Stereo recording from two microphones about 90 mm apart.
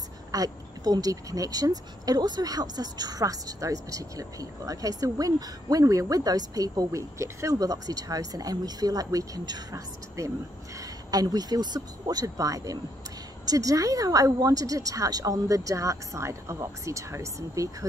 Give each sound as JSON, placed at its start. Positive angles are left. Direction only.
{"t": 0.3, "sound": "speech", "side_deg": -45}